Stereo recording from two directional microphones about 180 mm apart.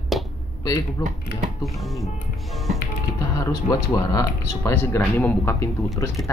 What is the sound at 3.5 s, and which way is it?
Speech, 20° left (ahead or behind).